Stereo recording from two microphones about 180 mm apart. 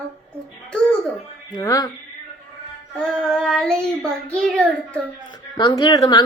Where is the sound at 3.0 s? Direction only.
5° left (ahead or behind).